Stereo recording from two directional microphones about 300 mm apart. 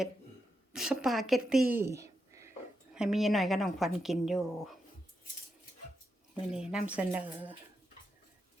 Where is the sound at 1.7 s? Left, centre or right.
Centre.